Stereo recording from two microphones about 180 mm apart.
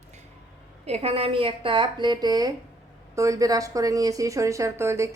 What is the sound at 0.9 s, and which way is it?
A woman's voice, 35° right (ahead or behind).